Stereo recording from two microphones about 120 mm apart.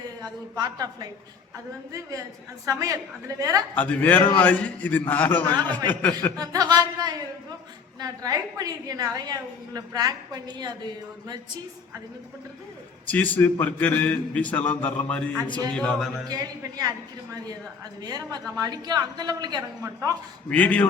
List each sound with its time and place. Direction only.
0.2 s a woman's voice: 35° right (ahead or behind)
3.8 s a man's voice: 15° left (ahead or behind)
6.3 s a woman's voice: 30° right (ahead or behind)
13.1 s a man's voice: 15° left (ahead or behind)
16.3 s a woman's voice: 35° right (ahead or behind)
18.0 s a woman's voice: 35° right (ahead or behind)
19.8 s a woman's voice: 25° right (ahead or behind)
20.5 s a man's voice: 10° left (ahead or behind)